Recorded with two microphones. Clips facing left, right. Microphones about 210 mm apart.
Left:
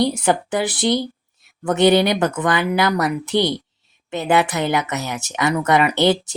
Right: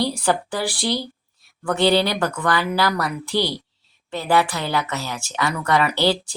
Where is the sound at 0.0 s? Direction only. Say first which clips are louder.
Left 3 dB; 20° left (ahead or behind).